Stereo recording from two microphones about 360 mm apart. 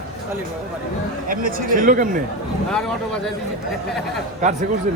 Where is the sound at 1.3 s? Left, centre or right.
Right.